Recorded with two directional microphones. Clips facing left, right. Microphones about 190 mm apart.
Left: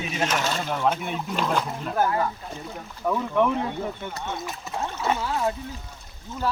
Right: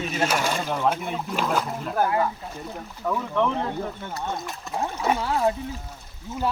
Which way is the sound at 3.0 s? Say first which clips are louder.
Left 2 dB; 10° left (ahead or behind).